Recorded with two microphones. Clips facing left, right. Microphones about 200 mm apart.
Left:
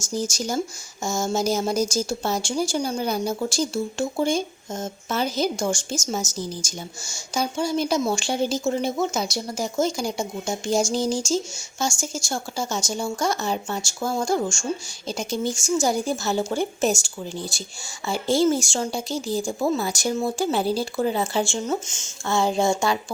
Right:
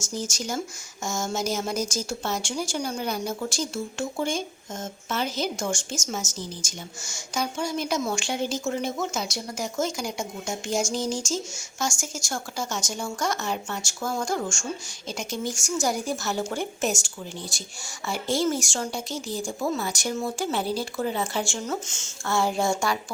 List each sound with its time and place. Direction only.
0.0 s speech: 35° left (ahead or behind)